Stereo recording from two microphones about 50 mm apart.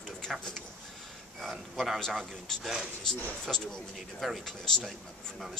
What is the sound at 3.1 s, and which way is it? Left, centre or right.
Speech, centre.